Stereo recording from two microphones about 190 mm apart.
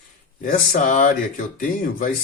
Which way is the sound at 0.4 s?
45° left (ahead or behind).